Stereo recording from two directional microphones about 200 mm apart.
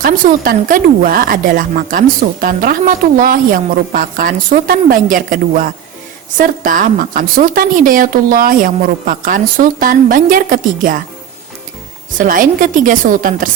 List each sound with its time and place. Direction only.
0.0 s a woman's voice: 45° right (ahead or behind)
12.1 s a woman's voice: 45° right (ahead or behind)